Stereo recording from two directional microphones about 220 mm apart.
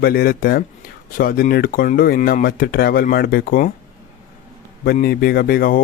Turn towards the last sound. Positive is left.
turn(degrees=40)  # may be behind; listen again after turning